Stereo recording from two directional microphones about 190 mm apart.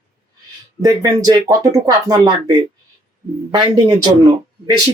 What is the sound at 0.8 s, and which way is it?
Speech, 20° right (ahead or behind).